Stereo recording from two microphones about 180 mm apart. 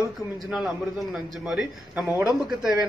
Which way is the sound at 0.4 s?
Centre (ahead or behind).